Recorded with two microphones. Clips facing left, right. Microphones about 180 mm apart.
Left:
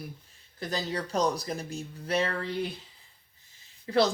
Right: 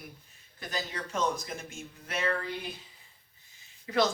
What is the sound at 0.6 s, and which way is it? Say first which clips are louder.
Speech: left 5 dB; 35° left (ahead or behind).